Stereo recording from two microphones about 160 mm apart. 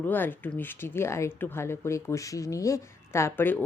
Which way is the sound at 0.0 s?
10° left (ahead or behind).